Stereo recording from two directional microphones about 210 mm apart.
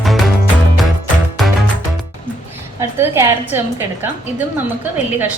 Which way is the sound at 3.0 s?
10° right (ahead or behind).